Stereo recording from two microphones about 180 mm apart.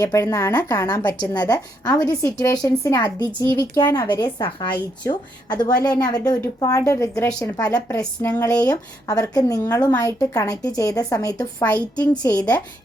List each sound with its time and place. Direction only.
0.0 s a woman's voice: 15° left (ahead or behind)